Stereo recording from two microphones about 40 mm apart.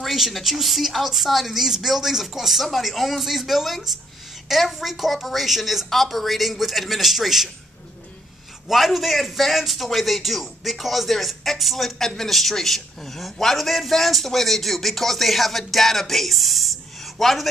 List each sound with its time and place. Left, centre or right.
0.0 s a man's voice: centre
8.6 s a man's voice: centre